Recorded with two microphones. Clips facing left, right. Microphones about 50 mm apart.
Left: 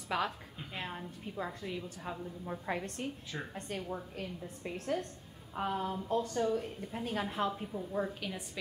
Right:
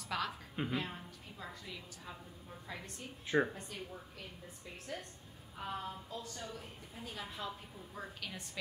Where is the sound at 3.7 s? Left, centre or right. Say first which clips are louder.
Left 8 dB; left.